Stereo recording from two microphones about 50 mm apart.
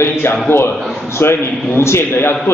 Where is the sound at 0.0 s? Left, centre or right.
Left.